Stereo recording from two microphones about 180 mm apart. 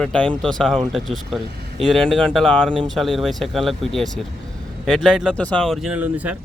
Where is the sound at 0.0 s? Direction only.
5° left (ahead or behind).